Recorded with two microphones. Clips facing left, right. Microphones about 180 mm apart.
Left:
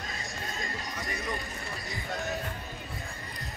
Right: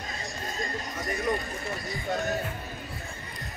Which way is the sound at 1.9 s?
Centre (ahead or behind).